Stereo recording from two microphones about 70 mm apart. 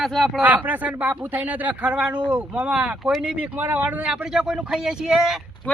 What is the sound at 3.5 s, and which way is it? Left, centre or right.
Speech, right.